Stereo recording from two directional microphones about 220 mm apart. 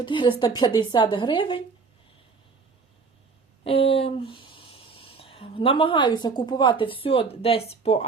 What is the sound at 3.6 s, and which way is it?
A woman's voice, 25° left (ahead or behind).